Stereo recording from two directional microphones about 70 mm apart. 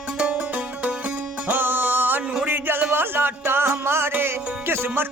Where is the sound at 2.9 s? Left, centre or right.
Right.